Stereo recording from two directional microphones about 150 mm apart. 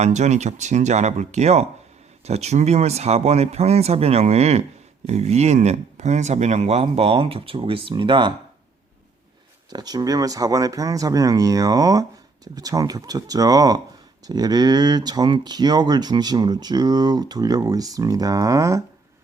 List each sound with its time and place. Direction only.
0.0 s speech: 50° right (ahead or behind); by 8.3 s 35° right (ahead or behind)
9.6 s speech: 25° right (ahead or behind)